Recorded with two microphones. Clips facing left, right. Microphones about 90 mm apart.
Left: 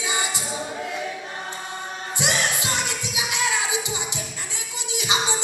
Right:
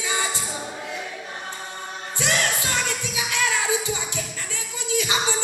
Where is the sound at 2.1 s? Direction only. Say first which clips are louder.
Right 1 dB; 20° left (ahead or behind).